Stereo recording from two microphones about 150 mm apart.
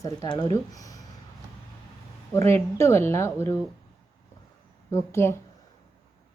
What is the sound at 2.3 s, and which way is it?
Speech, 15° left (ahead or behind).